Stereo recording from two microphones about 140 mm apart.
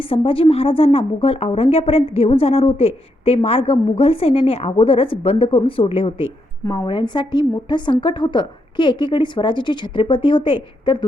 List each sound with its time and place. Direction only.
0.0 s a woman's voice: 40° left (ahead or behind)